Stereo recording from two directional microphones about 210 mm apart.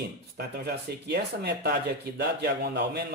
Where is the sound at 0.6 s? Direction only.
50° right (ahead or behind).